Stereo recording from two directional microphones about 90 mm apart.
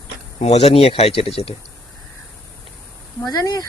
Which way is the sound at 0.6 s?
90° left.